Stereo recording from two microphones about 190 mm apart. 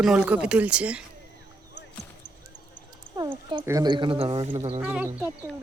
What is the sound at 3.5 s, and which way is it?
Speech, 20° right (ahead or behind).